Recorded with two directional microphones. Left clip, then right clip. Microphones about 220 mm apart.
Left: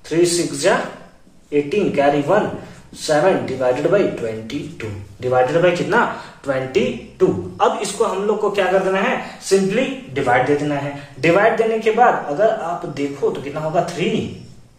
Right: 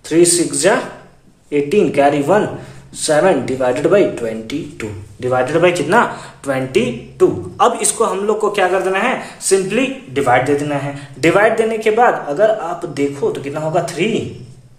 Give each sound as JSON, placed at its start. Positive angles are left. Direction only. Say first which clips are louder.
{"t": 0.1, "sound": "speech", "louder": "right 4 dB", "side_deg": -50}